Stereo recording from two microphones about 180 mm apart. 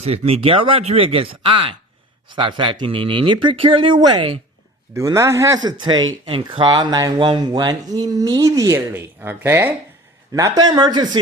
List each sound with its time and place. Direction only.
0.0 s speech: 35° right (ahead or behind)